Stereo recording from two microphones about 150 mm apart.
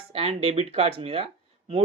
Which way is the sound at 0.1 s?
40° right (ahead or behind).